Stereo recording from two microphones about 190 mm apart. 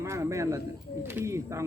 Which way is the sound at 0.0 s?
15° right (ahead or behind).